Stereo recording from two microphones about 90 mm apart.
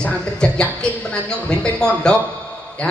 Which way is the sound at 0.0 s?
10° left (ahead or behind).